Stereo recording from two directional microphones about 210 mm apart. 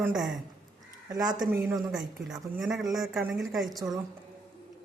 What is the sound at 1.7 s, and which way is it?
Speech, centre (ahead or behind).